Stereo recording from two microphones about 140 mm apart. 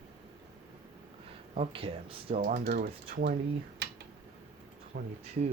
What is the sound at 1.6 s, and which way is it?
Speech, 40° right (ahead or behind).